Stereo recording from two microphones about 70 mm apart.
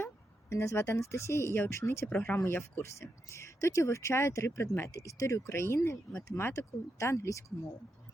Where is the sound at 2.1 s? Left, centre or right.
Left.